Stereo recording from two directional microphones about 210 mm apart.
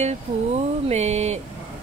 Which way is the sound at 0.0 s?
30° right (ahead or behind).